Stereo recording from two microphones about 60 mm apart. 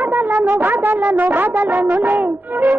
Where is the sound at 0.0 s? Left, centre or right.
Right.